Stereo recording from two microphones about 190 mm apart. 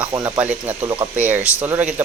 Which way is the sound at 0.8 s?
20° right (ahead or behind).